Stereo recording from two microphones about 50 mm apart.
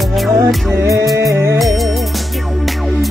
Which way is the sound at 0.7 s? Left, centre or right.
Right.